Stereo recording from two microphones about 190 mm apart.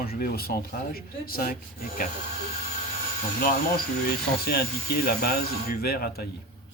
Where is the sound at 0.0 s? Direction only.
50° left (ahead or behind).